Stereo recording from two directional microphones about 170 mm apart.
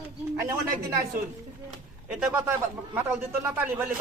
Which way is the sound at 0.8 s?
65° right (ahead or behind).